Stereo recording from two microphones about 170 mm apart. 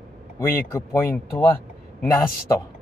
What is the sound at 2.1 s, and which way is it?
Speech, 20° left (ahead or behind).